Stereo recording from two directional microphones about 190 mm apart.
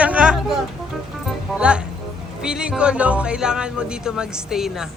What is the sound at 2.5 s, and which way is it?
Speech, 5° right (ahead or behind).